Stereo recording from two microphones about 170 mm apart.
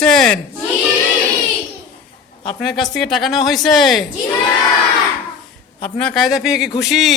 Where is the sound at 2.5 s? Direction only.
5° left (ahead or behind).